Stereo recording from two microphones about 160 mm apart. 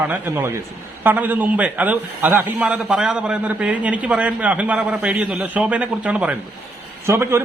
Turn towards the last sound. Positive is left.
turn(degrees=-15)  # may be behind; listen again after turning